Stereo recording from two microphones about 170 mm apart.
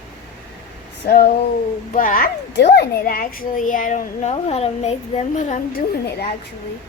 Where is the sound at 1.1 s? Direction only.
65° left (ahead or behind); by 5.6 s 45° left (ahead or behind).